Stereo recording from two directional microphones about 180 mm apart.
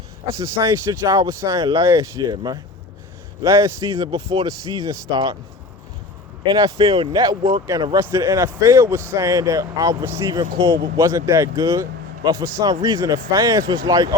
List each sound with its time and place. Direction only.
0.3 s speech: 15° right (ahead or behind)
3.9 s speech: 30° right (ahead or behind)
4.4 s speech: 20° right (ahead or behind)
6.4 s speech: 25° right (ahead or behind)
10.9 s speech: 15° right (ahead or behind)